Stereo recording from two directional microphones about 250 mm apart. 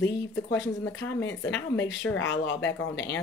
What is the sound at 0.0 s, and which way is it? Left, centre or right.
Speech, left.